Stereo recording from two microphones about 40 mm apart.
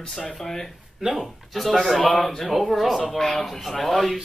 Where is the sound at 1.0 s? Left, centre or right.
Centre.